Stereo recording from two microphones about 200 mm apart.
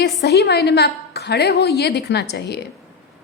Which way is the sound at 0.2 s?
55° left (ahead or behind).